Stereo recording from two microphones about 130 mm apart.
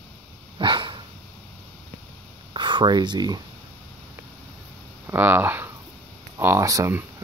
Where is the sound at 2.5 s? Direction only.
35° right (ahead or behind).